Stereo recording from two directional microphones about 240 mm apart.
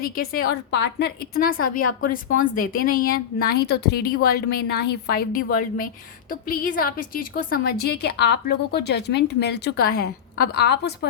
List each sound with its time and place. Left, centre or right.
0.0 s a woman's voice: left